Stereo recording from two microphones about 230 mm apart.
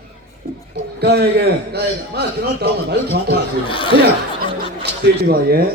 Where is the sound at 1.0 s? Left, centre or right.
Right.